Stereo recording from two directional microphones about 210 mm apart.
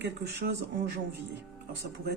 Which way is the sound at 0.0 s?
50° right (ahead or behind).